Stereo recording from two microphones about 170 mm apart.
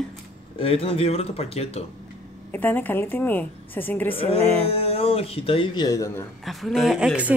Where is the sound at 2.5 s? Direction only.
10° left (ahead or behind).